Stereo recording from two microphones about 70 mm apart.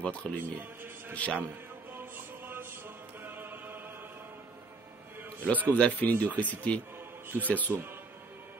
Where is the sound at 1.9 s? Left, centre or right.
Right.